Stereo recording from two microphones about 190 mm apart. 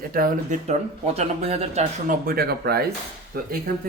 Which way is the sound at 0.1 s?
50° right (ahead or behind).